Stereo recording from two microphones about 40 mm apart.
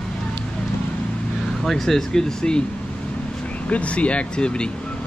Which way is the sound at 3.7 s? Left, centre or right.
Left.